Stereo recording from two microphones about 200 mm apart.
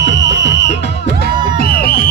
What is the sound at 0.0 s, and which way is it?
Music, 65° left (ahead or behind).